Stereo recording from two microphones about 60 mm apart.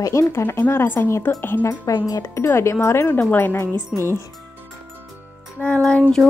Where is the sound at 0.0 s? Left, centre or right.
Left.